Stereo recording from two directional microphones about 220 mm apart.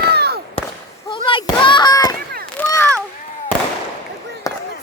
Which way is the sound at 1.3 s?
20° left (ahead or behind).